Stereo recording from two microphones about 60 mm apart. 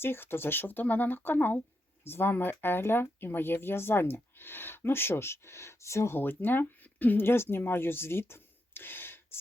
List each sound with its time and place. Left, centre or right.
0.0 s speech: left
6.1 s speech: left